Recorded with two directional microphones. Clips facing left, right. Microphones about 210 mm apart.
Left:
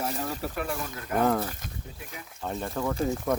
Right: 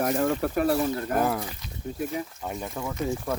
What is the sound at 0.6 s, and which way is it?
Speech, 40° right (ahead or behind).